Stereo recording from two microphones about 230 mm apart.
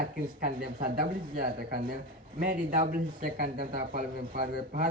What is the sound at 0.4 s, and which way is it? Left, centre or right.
Speech, right.